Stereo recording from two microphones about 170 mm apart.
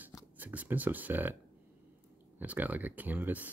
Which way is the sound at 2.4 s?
10° right (ahead or behind).